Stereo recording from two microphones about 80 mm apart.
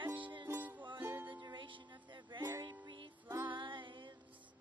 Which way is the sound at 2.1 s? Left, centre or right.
Right.